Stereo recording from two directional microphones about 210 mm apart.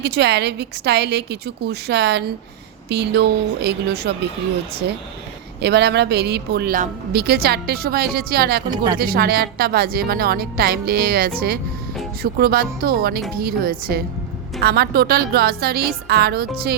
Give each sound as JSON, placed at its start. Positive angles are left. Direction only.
{"t": 0.0, "sound": "a woman's voice", "side_deg": -55}
{"t": 5.6, "sound": "a woman's voice", "side_deg": -55}